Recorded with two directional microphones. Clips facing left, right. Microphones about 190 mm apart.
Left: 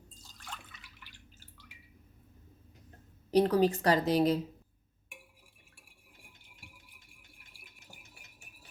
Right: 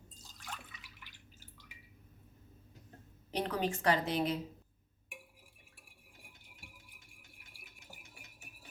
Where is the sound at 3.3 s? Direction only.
35° left (ahead or behind).